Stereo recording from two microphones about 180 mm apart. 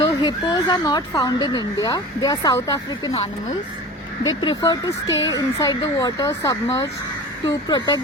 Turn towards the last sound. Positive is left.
turn(degrees=20)  # may be behind; listen again after turning